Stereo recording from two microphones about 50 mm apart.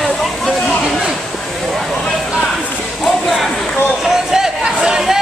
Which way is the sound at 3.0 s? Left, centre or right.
Centre.